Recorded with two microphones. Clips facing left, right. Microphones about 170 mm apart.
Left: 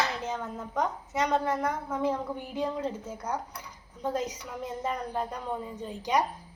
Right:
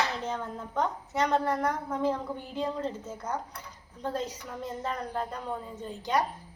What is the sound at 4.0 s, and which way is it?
Speech, 10° left (ahead or behind).